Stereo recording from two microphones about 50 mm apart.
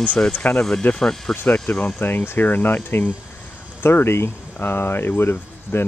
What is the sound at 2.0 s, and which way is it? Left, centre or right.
Speech, left.